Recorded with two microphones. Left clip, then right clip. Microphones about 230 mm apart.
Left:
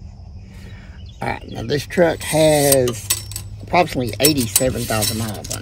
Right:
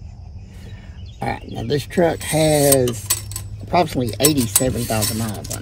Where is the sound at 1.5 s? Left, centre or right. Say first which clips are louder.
Even; left.